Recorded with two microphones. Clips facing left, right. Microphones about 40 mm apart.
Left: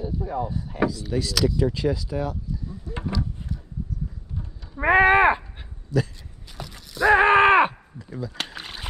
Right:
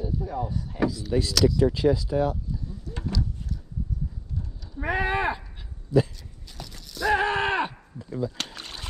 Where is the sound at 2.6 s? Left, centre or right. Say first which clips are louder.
Left 3 dB; centre; by 5.6 s left.